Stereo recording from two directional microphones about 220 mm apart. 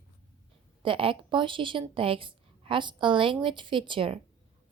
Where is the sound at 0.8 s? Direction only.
25° right (ahead or behind).